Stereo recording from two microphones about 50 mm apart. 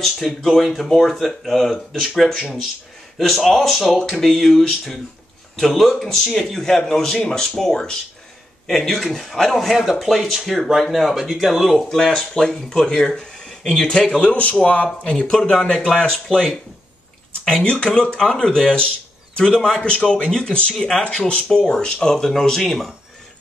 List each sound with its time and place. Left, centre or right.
0.0 s speech: centre
12.0 s speech: centre
17.5 s speech: centre